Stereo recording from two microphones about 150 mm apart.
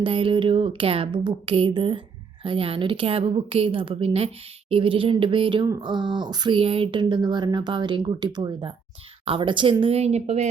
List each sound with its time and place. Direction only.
0.0 s speech: 35° right (ahead or behind)